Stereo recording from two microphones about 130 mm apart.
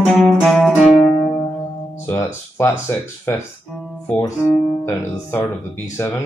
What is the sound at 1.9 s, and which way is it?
Speech, 20° left (ahead or behind).